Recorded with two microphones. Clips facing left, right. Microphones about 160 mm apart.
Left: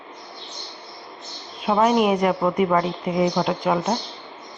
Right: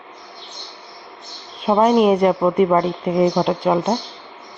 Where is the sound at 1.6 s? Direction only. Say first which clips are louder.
Right 4 dB; 30° right (ahead or behind).